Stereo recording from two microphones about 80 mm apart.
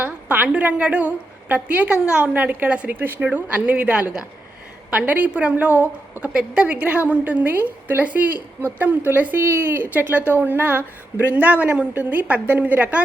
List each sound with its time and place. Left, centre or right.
0.0 s a woman's voice: centre